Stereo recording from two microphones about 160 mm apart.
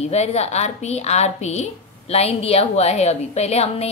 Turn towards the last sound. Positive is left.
turn(degrees=40)  # may be behind; listen again after turning